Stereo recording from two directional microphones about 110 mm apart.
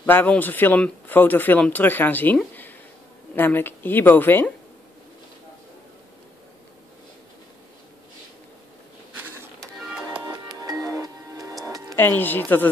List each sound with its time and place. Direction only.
0.0 s speech: 15° left (ahead or behind)
3.3 s a woman's voice: 20° left (ahead or behind)
9.1 s printer: 20° right (ahead or behind)
9.6 s music: centre (ahead or behind)
10.2 s music: 40° right (ahead or behind)
12.0 s speech: 20° left (ahead or behind)